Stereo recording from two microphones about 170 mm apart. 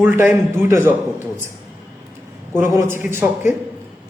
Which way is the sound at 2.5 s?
15° right (ahead or behind).